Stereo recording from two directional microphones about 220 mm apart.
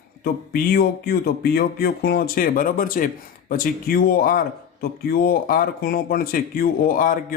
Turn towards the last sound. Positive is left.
turn(degrees=40)  # may be behind; listen again after turning